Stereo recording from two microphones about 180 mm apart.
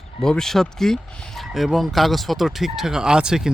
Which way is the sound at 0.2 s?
5° left (ahead or behind).